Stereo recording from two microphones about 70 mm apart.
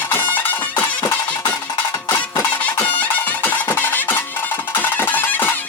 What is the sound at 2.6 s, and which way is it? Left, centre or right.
Music, left.